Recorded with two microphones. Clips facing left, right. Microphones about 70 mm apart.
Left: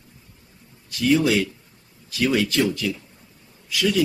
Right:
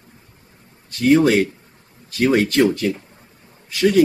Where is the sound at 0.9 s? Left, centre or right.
Right.